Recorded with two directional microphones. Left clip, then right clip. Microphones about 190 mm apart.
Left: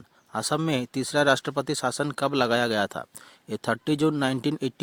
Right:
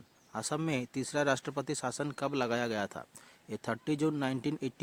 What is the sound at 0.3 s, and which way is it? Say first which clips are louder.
Speech: left 8 dB; 45° left (ahead or behind).